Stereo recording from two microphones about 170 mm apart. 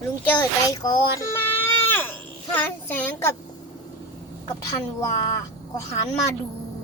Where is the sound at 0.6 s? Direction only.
25° left (ahead or behind).